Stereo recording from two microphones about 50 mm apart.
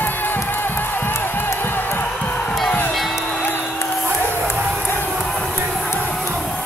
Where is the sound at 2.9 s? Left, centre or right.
Centre.